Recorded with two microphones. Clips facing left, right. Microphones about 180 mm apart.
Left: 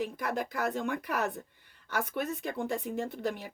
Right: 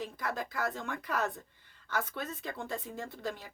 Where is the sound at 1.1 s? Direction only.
65° left (ahead or behind).